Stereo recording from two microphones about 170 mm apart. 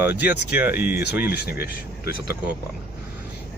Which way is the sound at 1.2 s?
70° left (ahead or behind).